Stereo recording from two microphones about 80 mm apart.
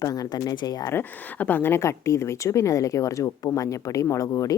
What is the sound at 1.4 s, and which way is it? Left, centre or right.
A woman's voice, left.